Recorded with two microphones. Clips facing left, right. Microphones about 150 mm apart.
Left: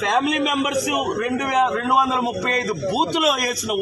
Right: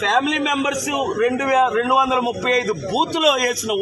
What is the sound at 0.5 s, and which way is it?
A man's voice, 20° right (ahead or behind).